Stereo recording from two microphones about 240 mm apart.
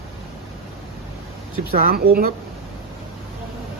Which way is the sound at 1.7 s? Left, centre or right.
Right.